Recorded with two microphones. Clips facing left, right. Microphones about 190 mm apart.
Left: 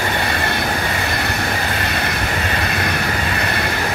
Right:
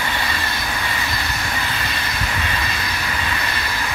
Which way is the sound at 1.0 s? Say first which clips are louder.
Left 5 dB; 60° left (ahead or behind).